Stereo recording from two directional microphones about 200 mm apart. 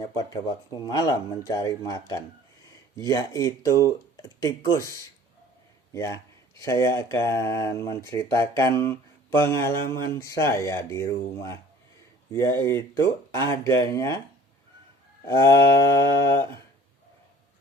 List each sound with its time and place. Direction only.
0.0 s a man's voice: 20° left (ahead or behind)
15.2 s speech: 15° left (ahead or behind)